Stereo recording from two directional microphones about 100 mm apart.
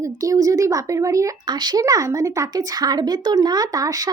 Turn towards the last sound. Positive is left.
turn(degrees=-35)  # may be behind; listen again after turning